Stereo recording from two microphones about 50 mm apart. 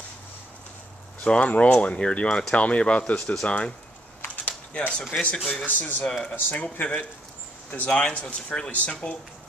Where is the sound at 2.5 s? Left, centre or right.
Left.